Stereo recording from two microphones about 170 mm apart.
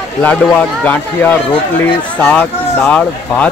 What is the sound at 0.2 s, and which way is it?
Speech, 10° left (ahead or behind).